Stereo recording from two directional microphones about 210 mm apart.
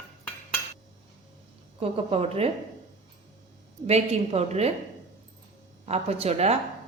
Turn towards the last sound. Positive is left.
turn(degrees=-30)  # may be behind; listen again after turning